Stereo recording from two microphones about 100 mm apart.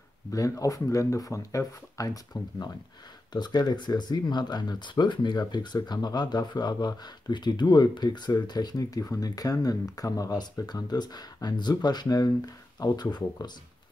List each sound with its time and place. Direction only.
0.3 s speech: 35° left (ahead or behind)